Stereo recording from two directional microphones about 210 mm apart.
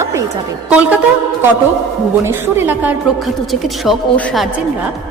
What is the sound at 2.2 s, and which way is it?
A woman's voice, 10° right (ahead or behind).